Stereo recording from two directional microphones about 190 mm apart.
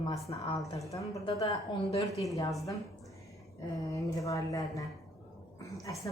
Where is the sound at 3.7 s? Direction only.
20° left (ahead or behind).